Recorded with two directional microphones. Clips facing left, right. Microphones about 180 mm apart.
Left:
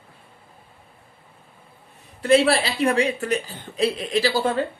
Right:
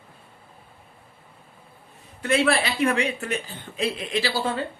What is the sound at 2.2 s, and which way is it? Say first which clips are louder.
A woman's voice: left 4 dB; 30° left (ahead or behind).